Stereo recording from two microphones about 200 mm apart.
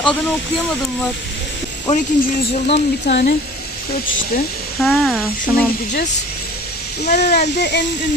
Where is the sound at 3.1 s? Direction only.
50° left (ahead or behind).